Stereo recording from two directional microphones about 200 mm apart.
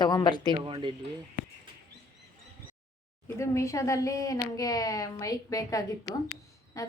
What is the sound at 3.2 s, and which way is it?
A woman's voice, 15° left (ahead or behind).